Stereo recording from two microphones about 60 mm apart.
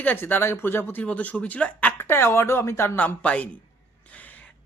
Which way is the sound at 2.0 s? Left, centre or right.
Left.